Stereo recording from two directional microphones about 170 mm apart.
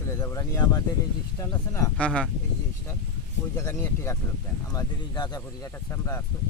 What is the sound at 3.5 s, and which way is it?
Speech, 15° left (ahead or behind).